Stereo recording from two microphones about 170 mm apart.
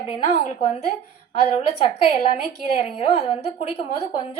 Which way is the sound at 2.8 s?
35° left (ahead or behind).